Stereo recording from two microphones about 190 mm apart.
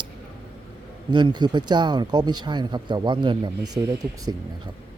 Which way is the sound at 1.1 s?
25° right (ahead or behind).